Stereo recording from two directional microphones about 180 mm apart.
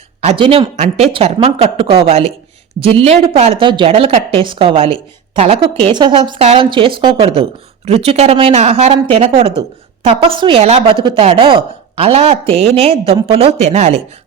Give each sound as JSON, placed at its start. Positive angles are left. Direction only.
{"t": 0.2, "sound": "a woman's voice", "side_deg": -30}